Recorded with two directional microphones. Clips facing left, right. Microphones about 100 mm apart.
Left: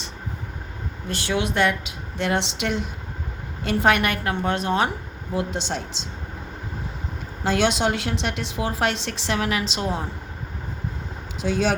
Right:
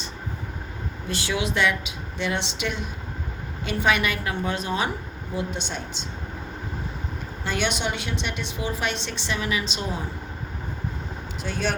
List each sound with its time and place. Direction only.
1.0 s speech: 50° left (ahead or behind)
2.1 s a woman's voice: 75° left (ahead or behind)
5.3 s a woman's voice: 80° left
7.4 s a woman's voice: 90° left